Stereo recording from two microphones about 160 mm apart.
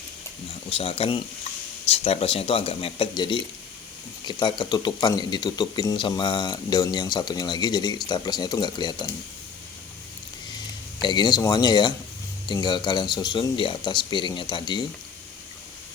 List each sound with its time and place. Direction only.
0.7 s speech: 35° left (ahead or behind)
11.0 s speech: 25° left (ahead or behind)